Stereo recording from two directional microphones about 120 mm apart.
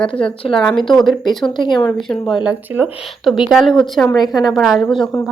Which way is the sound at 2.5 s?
15° right (ahead or behind).